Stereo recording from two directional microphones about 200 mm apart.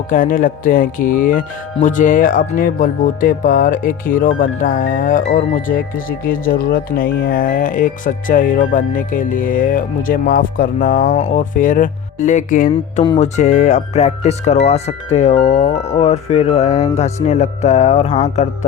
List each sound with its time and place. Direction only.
0.1 s speech: 45° left (ahead or behind)